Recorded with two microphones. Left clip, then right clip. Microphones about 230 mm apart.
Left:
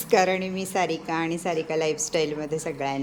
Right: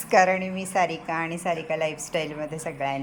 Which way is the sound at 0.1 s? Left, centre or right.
Centre.